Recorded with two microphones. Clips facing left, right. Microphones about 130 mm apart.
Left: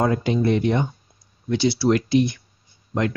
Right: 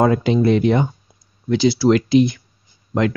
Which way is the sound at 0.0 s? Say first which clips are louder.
Right 5 dB; 90° right.